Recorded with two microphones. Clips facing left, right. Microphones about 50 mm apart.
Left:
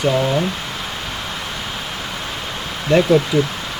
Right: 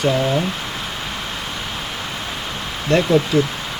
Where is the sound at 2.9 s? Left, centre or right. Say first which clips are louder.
Left 2 dB; centre.